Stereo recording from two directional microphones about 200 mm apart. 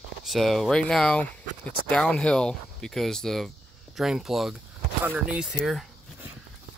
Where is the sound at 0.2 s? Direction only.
Centre (ahead or behind).